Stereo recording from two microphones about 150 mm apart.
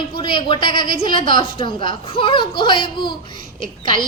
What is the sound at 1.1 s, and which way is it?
Speech, 65° right (ahead or behind).